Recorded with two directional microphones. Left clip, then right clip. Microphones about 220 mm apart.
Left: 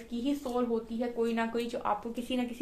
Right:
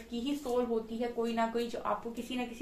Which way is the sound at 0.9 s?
45° left (ahead or behind).